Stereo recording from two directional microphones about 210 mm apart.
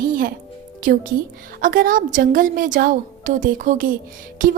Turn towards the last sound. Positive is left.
turn(degrees=-40)  # may be behind; listen again after turning